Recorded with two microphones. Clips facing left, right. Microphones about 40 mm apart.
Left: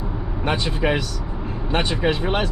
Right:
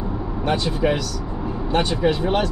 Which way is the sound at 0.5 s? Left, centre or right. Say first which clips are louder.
Right 1 dB; left.